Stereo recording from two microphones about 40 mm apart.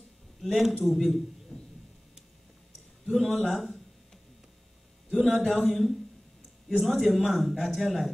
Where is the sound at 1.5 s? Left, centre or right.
Centre.